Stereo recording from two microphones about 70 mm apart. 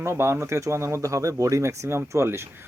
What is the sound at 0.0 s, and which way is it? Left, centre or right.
Speech, right.